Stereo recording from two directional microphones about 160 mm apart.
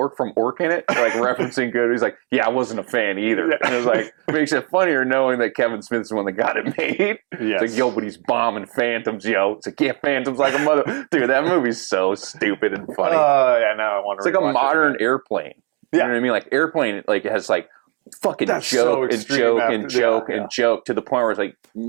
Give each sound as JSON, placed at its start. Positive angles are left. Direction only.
{"t": 0.0, "sound": "speech", "side_deg": -20}